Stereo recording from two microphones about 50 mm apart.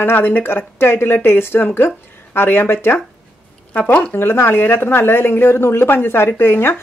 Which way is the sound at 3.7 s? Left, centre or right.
Left.